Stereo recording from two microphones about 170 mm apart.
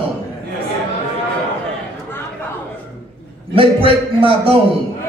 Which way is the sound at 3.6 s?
30° right (ahead or behind).